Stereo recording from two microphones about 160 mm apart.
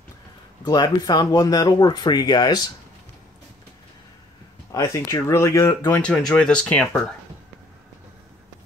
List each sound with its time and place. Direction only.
0.7 s speech: 25° left (ahead or behind)
4.7 s speech: 20° left (ahead or behind)